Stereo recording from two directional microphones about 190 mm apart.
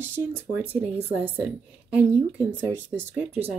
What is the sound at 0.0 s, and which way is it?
A woman's voice, 10° right (ahead or behind).